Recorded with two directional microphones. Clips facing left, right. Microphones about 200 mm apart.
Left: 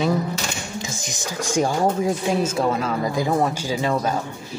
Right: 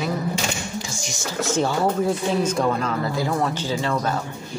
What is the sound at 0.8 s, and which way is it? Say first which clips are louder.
Speech: even; 20° left (ahead or behind).